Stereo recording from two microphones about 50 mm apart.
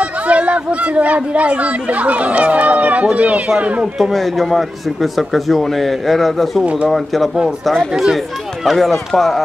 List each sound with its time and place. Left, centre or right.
0.0 s speech: right
4.1 s a man's voice: centre
6.6 s speech: right
7.4 s a man's voice: centre